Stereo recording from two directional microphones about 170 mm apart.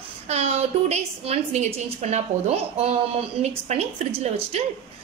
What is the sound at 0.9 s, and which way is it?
A woman's voice, 40° right (ahead or behind).